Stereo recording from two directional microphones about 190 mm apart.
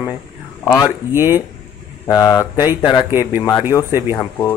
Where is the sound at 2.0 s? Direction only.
20° left (ahead or behind).